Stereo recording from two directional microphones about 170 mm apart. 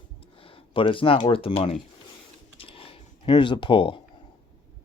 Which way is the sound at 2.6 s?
35° left (ahead or behind).